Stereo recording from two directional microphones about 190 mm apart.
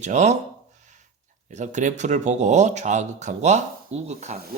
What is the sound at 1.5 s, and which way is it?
Speech, 40° right (ahead or behind).